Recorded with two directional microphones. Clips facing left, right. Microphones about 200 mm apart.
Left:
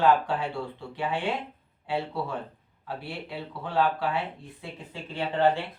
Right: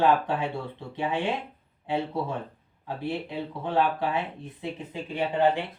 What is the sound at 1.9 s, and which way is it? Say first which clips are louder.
Speech: right 2 dB; 20° right (ahead or behind).